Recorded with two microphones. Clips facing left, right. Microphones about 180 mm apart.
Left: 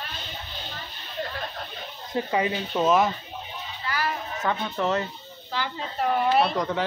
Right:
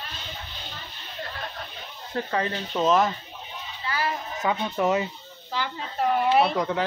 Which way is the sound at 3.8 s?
25° right (ahead or behind).